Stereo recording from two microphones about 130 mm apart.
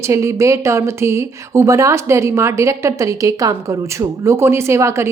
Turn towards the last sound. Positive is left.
turn(degrees=-20)  # may be behind; listen again after turning